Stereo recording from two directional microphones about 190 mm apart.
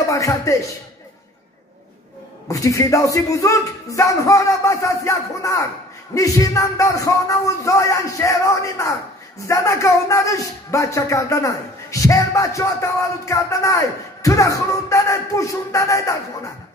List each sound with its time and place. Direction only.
0.1 s speech: 15° left (ahead or behind)
2.4 s speech: 15° left (ahead or behind)